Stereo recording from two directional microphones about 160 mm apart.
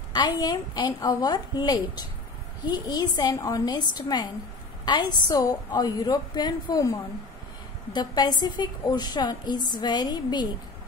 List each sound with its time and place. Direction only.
0.1 s a woman's voice: 25° left (ahead or behind)
7.9 s a woman's voice: 25° left (ahead or behind)